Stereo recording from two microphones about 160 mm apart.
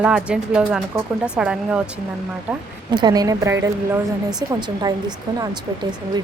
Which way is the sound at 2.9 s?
25° right (ahead or behind).